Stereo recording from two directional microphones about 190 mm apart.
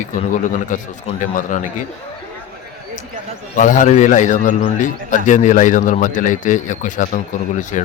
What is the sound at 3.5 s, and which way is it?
A man's voice, 40° left (ahead or behind).